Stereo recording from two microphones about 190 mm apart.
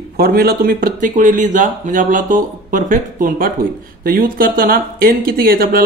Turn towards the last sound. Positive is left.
turn(degrees=-50)  # may be behind; listen again after turning